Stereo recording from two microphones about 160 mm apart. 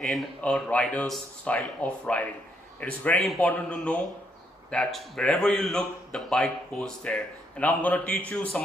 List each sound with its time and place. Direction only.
0.0 s a man's voice: 5° left (ahead or behind)